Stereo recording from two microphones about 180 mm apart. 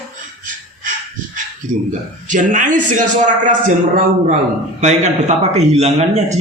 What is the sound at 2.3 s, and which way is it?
A man's voice, 45° right (ahead or behind).